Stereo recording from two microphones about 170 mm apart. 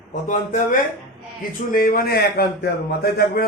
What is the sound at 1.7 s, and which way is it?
A man's voice, 60° left (ahead or behind).